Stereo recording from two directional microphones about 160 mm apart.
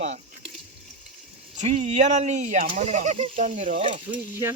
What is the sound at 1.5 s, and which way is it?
Speech, 50° right (ahead or behind).